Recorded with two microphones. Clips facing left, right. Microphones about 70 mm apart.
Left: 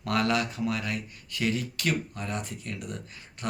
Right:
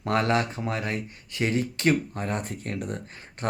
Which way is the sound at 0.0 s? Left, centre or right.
Right.